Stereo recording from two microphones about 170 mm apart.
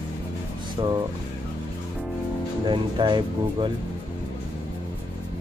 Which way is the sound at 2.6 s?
25° right (ahead or behind).